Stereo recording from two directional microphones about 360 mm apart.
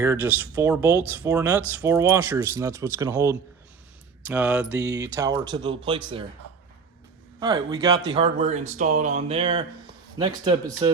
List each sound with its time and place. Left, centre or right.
0.0 s speech: centre
4.3 s mantra: centre
4.7 s speech: centre
7.3 s speech: centre